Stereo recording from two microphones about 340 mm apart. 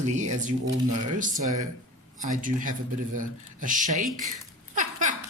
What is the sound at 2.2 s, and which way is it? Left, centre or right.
Speech, right.